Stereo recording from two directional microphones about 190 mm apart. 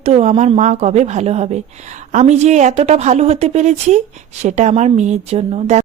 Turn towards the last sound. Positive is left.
turn(degrees=-35)  # may be behind; listen again after turning